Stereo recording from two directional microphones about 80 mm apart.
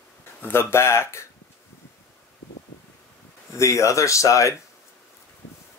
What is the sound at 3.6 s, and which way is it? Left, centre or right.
Speech, left.